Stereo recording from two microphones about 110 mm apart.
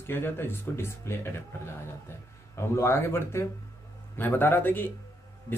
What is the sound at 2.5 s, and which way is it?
Speech, 25° left (ahead or behind).